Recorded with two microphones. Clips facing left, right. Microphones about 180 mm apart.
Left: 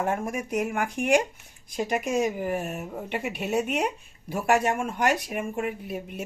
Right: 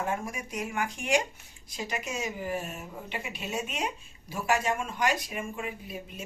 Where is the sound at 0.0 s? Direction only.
55° left (ahead or behind).